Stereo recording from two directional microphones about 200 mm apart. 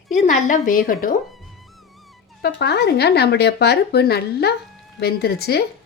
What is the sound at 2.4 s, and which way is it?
A woman's voice, 55° left (ahead or behind).